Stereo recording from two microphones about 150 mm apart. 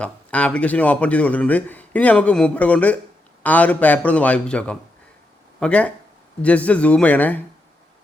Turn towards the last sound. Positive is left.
turn(degrees=10)  # may be behind; listen again after turning